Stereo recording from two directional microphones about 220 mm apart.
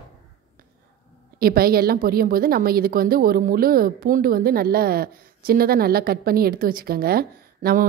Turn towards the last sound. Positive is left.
turn(degrees=-45)  # may be behind; listen again after turning